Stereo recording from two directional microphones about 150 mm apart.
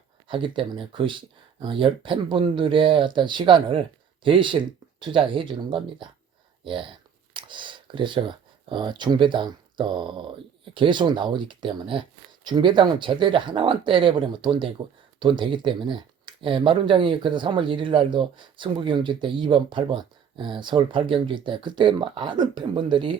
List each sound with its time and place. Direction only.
0.3 s speech: 35° right (ahead or behind)
7.3 s speech: 30° right (ahead or behind)